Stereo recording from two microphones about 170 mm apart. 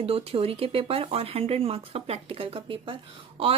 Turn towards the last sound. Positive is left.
turn(degrees=-30)  # may be behind; listen again after turning